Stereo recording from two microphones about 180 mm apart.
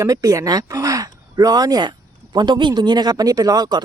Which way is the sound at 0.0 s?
20° right (ahead or behind).